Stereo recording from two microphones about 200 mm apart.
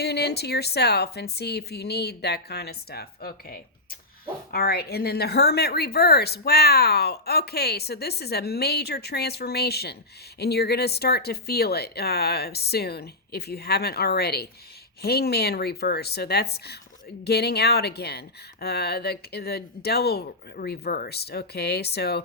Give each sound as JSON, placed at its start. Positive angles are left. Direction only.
{"t": 0.0, "sound": "a woman's voice", "side_deg": 55}